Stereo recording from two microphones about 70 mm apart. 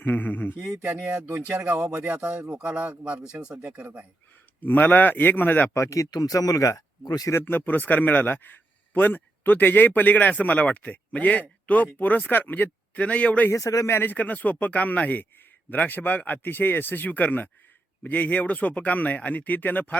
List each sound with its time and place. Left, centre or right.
0.0 s speech: left
0.8 s speech: right
4.6 s speech: left
5.7 s speech: left
7.4 s speech: left
13.5 s a man's voice: left
13.9 s speech: left